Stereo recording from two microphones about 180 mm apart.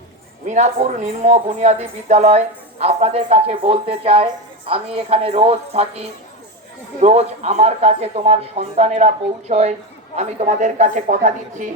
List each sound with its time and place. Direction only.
0.4 s a woman's voice: 40° right (ahead or behind)